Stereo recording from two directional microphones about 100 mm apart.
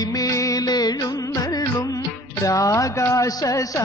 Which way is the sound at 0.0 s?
40° left (ahead or behind).